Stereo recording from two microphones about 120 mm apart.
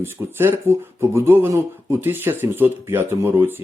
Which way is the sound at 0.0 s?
20° right (ahead or behind).